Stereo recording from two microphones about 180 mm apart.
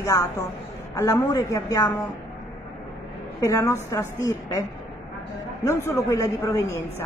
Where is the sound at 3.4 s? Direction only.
15° left (ahead or behind).